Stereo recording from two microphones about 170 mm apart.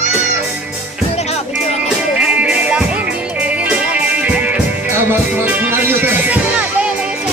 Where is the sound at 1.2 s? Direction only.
40° left (ahead or behind).